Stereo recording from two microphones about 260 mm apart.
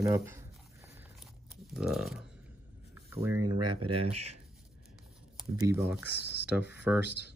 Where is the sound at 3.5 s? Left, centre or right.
Right.